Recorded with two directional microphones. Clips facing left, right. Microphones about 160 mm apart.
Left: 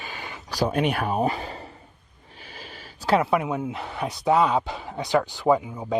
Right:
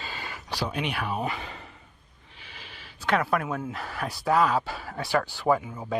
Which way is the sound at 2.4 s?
40° left (ahead or behind).